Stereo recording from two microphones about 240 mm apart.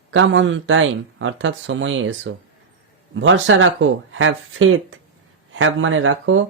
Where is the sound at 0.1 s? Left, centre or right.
Right.